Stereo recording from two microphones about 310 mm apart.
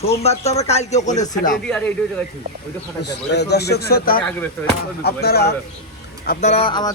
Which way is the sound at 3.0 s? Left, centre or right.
Left.